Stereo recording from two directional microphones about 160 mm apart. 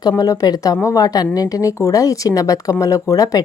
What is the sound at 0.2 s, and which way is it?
Speech, 20° left (ahead or behind).